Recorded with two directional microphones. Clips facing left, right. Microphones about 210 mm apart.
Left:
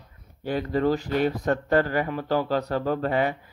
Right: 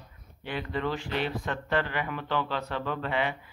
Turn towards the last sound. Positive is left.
turn(degrees=40)  # may be behind; listen again after turning